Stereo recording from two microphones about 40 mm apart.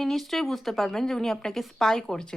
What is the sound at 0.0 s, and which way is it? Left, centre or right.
A woman's voice, centre.